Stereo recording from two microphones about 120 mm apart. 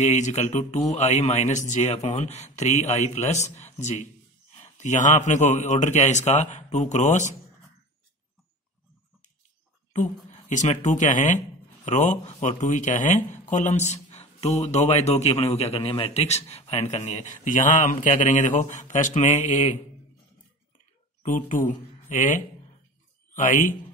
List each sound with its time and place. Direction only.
0.0 s a man's voice: 80° left
10.5 s a man's voice: 85° left
21.2 s speech: 90° left